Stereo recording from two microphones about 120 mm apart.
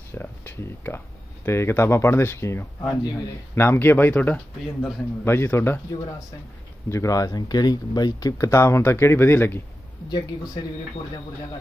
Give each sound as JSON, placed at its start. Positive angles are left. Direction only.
{"t": 0.1, "sound": "speech", "side_deg": 20}
{"t": 10.0, "sound": "speech", "side_deg": 35}